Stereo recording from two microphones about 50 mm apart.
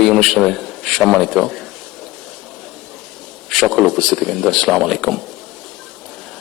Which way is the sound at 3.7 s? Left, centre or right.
Centre.